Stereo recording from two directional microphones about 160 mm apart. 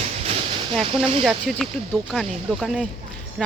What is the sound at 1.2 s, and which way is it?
Speech, 5° left (ahead or behind).